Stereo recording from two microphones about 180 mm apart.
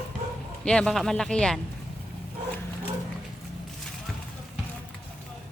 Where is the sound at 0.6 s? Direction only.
5° left (ahead or behind).